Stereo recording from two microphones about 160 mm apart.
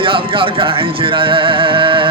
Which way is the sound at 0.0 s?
35° right (ahead or behind).